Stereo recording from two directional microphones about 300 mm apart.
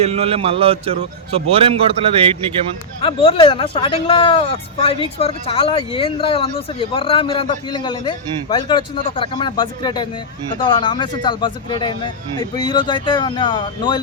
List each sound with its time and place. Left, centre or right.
0.0 s a man's voice: centre
3.0 s speech: centre